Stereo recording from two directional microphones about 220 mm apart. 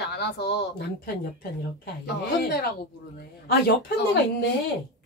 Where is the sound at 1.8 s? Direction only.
45° left (ahead or behind).